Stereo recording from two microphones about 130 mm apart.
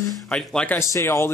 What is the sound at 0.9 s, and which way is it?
Speech, 20° left (ahead or behind).